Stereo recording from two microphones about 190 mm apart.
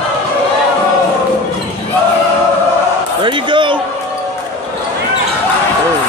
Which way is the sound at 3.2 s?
25° right (ahead or behind).